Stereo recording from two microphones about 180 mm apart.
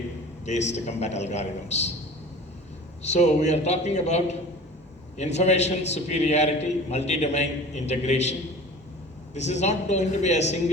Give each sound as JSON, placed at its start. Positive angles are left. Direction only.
{"t": 0.4, "sound": "a man's voice", "side_deg": 40}
{"t": 3.0, "sound": "a man's voice", "side_deg": 40}